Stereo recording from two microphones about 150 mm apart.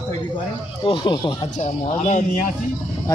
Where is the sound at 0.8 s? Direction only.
35° left (ahead or behind).